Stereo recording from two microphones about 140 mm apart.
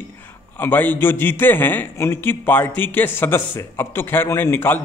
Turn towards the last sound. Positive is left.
turn(degrees=15)  # may be behind; listen again after turning